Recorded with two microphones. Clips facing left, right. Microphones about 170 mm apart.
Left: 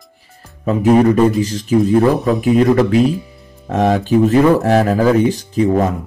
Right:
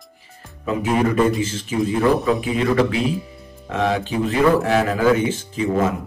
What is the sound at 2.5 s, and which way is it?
Speech, 45° left (ahead or behind).